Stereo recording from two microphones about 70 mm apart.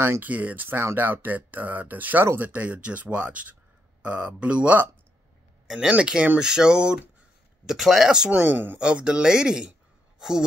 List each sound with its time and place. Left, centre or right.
0.2 s speech: right
8.3 s speech: right
8.7 s speech: centre